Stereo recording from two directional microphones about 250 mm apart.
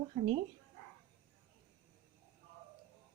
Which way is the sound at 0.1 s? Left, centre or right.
Right.